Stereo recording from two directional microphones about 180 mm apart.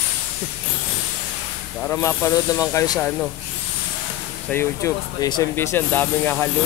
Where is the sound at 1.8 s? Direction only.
15° left (ahead or behind).